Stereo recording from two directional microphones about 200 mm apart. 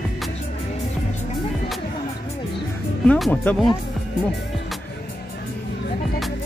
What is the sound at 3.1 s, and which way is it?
Speech, 5° left (ahead or behind).